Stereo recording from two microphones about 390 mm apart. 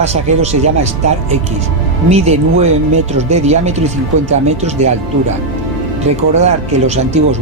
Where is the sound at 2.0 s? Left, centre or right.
Centre.